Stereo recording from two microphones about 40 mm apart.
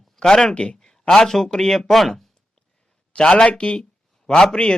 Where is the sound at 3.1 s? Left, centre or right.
Left.